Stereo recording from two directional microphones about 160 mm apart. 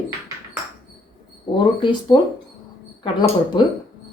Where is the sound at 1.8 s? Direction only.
30° left (ahead or behind).